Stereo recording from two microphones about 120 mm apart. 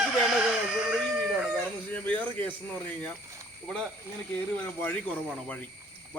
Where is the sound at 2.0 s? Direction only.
15° left (ahead or behind).